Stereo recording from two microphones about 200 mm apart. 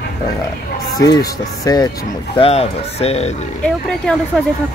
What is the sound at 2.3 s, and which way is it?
Speech, 30° left (ahead or behind).